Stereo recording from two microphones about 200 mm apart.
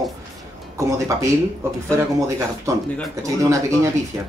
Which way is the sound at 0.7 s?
15° right (ahead or behind).